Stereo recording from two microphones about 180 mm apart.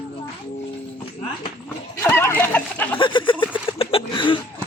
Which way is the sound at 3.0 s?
25° left (ahead or behind).